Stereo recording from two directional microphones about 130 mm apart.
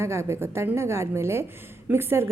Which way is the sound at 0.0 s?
20° right (ahead or behind).